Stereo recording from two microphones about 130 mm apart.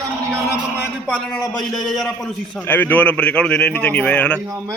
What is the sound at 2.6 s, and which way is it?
Speech, 15° left (ahead or behind).